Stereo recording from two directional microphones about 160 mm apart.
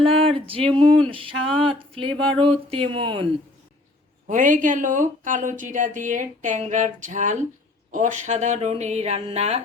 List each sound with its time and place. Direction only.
0.0 s a sound: 35° right (ahead or behind)
0.7 s speech: 30° right (ahead or behind)
4.3 s speech: 55° right (ahead or behind)